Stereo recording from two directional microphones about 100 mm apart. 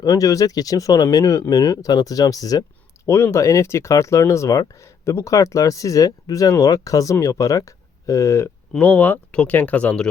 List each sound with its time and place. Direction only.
0.0 s speech: 35° left (ahead or behind)
3.1 s speech: 25° left (ahead or behind)
8.8 s speech: 15° left (ahead or behind)